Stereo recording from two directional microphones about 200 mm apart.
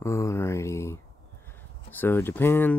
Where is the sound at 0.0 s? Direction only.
15° left (ahead or behind).